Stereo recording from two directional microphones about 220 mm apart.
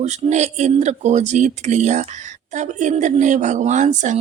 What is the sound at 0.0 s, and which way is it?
Speech, 30° right (ahead or behind).